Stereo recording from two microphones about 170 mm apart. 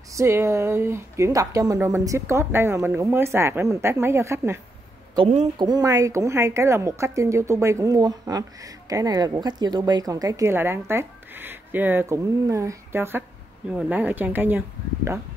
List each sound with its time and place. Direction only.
0.1 s speech: 15° right (ahead or behind)
5.6 s a woman's voice: 20° right (ahead or behind)